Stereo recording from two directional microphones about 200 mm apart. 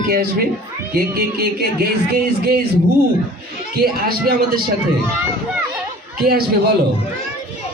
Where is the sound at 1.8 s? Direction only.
50° right (ahead or behind).